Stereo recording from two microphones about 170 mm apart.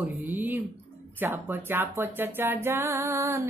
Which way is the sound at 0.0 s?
10° right (ahead or behind).